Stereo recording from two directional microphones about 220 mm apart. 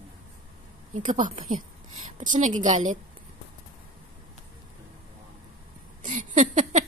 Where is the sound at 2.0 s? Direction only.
35° right (ahead or behind).